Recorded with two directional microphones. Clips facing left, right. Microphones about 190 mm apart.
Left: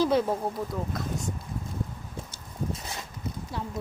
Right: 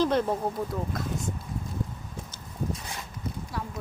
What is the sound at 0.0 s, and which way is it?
Speech, 5° left (ahead or behind).